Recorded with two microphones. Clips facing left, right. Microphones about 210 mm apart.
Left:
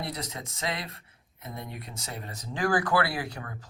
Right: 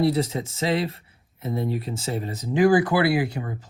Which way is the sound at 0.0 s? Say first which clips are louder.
Right 14 dB; 30° right (ahead or behind).